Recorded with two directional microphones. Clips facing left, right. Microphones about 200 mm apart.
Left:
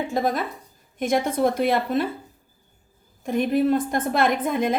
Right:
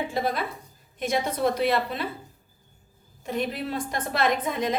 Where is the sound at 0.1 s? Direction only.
45° left (ahead or behind).